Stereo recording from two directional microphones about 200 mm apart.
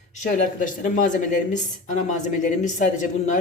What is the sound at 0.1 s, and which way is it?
Speech, 40° left (ahead or behind).